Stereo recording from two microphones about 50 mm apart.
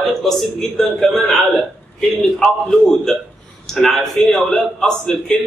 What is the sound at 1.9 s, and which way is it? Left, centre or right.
A man's voice, centre.